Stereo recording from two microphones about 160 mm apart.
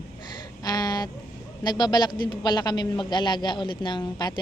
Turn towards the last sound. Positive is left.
turn(degrees=25)  # may be behind; listen again after turning